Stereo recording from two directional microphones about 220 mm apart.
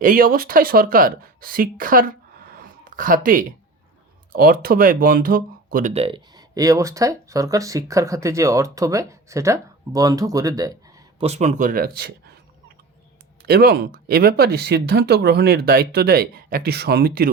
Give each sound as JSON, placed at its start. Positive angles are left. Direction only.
{"t": 0.0, "sound": "speech", "side_deg": -40}
{"t": 5.9, "sound": "speech", "side_deg": -25}
{"t": 11.3, "sound": "speech", "side_deg": -30}
{"t": 13.4, "sound": "speech", "side_deg": -45}